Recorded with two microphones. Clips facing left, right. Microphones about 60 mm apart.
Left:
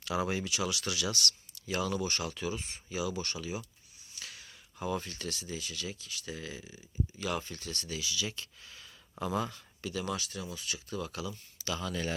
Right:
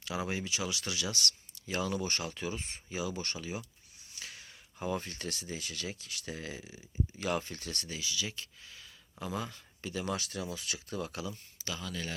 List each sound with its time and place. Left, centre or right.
0.0 s speech: centre; by 3.6 s right
4.2 s a sound: right
5.3 s speech: right
7.2 s speech: right
7.9 s speech: right
9.2 s speech: centre
9.8 s speech: right
10.2 s speech: right
10.5 s speech: right
10.8 s speech: right
11.1 s speech: right
11.8 s speech: centre